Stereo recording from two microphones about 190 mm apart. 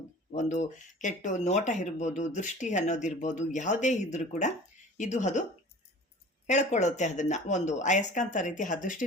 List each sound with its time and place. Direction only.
0.3 s speech: 40° left (ahead or behind)
6.5 s speech: 40° left (ahead or behind)